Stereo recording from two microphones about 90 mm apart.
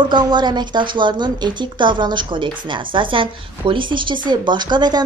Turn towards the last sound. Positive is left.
turn(degrees=-55)  # may be behind; listen again after turning